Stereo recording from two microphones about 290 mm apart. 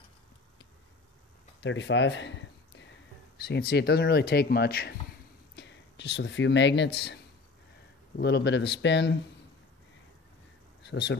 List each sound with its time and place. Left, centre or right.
1.6 s speech: left
8.2 s speech: left
10.8 s speech: left